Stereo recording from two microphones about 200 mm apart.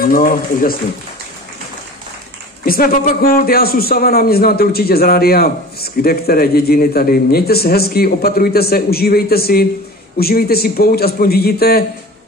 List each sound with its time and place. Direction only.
0.1 s a man's voice: 45° left (ahead or behind)
2.6 s a man's voice: 45° left (ahead or behind)